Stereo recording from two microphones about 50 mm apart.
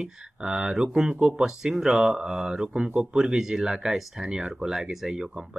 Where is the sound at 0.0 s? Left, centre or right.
Centre.